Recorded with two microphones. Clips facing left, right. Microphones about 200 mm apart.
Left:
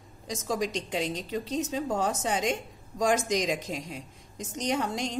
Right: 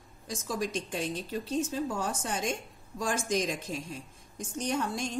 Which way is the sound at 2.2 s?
90° left.